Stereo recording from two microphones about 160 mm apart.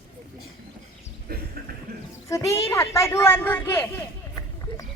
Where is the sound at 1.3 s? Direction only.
75° right (ahead or behind).